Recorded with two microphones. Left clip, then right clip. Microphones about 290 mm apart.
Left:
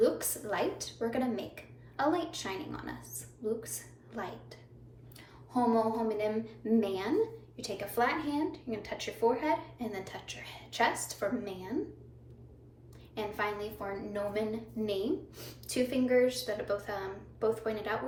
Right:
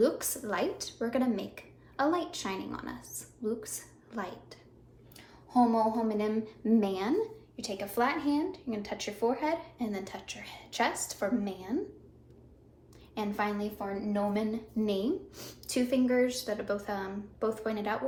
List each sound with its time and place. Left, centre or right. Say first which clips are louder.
0.0 s a woman's voice: right 1 dB; centre
5.5 s a woman's voice: right 2 dB; centre
13.1 s a woman's voice: right 2 dB; centre